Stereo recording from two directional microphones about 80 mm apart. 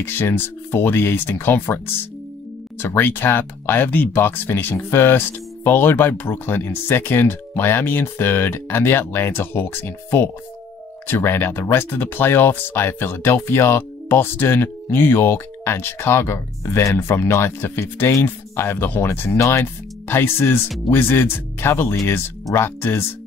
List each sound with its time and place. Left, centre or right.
0.0 s speech: left